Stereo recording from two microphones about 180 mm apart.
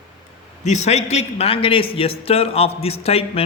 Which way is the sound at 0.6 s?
40° left (ahead or behind).